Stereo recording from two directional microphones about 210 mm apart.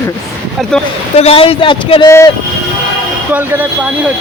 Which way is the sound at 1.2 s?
25° left (ahead or behind).